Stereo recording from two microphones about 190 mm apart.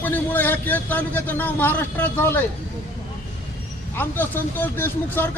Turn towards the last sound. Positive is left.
turn(degrees=10)  # may be behind; listen again after turning